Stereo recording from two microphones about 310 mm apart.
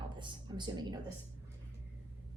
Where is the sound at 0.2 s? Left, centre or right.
Centre.